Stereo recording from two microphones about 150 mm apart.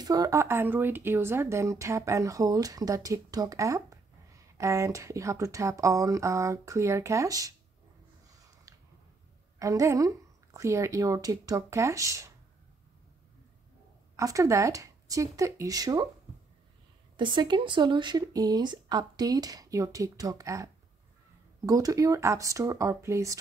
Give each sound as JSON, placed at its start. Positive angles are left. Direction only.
{"t": 0.0, "sound": "speech", "side_deg": -25}
{"t": 8.3, "sound": "a sound", "side_deg": -25}
{"t": 9.6, "sound": "speech", "side_deg": -20}
{"t": 14.1, "sound": "speech", "side_deg": -20}
{"t": 17.2, "sound": "speech", "side_deg": -30}